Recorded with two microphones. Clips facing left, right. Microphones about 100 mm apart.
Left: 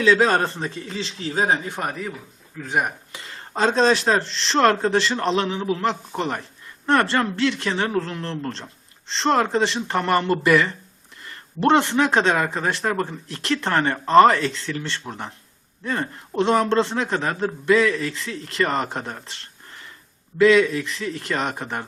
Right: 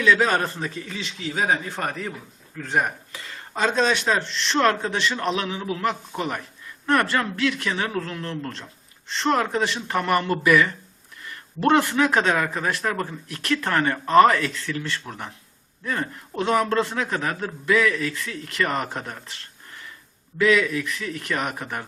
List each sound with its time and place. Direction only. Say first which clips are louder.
0.0 s a man's voice: left 2 dB; 30° left (ahead or behind)
1.5 s speech: left 1 dB; 15° left (ahead or behind)
1.9 s speech: left 1 dB; 5° left (ahead or behind)
3.1 s a man's voice: left 1 dB; 30° left (ahead or behind)
20.4 s a man's voice: left 4 dB; 30° left (ahead or behind)